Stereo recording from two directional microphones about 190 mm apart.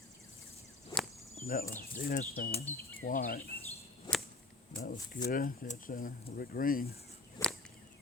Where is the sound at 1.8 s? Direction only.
50° left (ahead or behind).